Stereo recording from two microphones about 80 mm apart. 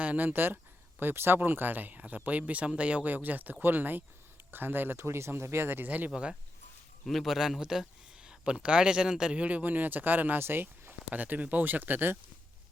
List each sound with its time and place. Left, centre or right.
0.0 s speech: centre
7.0 s speech: centre; by 12.1 s right